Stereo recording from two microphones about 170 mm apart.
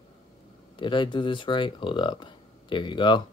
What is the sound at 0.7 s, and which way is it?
Speech, 30° left (ahead or behind).